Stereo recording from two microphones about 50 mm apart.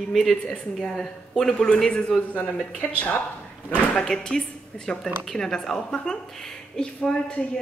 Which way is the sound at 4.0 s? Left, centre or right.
Centre.